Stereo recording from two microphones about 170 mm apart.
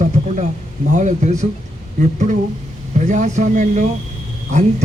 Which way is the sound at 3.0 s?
45° right (ahead or behind).